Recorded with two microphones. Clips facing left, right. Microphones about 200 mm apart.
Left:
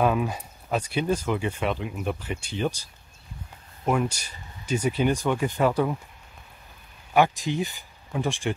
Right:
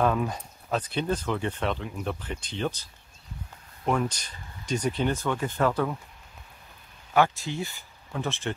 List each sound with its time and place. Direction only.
0.0 s speech: 10° left (ahead or behind)
7.2 s speech: 15° left (ahead or behind)